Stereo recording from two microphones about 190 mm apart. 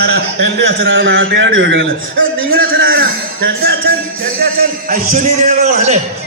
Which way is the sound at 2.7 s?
90° right.